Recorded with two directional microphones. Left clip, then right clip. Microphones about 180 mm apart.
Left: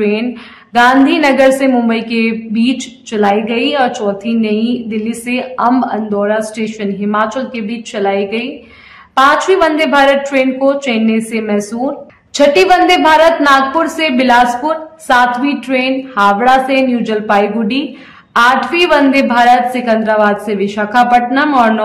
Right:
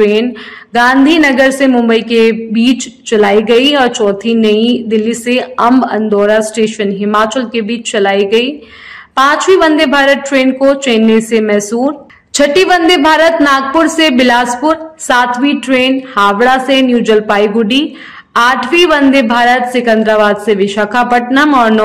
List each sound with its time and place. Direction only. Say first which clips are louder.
0.0 s a woman's voice: right 6 dB; 25° right (ahead or behind)